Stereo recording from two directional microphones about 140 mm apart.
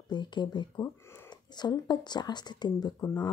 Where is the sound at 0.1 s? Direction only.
30° left (ahead or behind).